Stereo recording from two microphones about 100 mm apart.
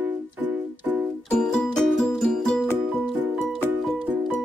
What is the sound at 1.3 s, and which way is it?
Music, 5° left (ahead or behind).